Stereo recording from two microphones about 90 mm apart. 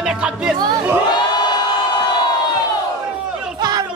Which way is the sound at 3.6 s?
50° right (ahead or behind).